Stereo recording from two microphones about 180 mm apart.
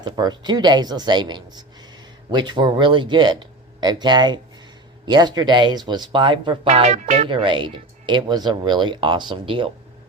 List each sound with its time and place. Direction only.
0.0 s speech: 25° right (ahead or behind)